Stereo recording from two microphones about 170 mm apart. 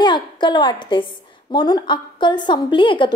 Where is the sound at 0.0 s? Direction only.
25° left (ahead or behind).